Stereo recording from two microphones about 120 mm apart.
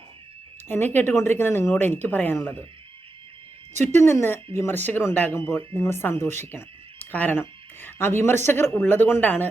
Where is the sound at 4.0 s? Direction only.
20° left (ahead or behind).